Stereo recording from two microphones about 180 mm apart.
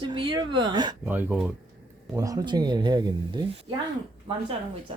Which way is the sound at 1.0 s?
10° right (ahead or behind).